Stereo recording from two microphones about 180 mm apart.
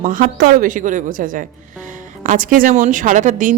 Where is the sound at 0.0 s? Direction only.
50° right (ahead or behind).